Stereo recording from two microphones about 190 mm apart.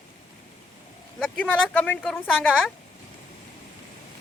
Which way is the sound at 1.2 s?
10° left (ahead or behind).